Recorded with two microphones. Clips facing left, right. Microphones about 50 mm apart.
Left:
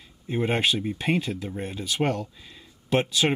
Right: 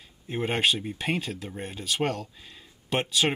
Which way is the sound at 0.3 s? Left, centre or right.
Centre.